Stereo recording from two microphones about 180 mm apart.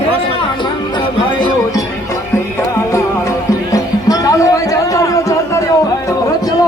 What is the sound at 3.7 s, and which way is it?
Music, 20° left (ahead or behind).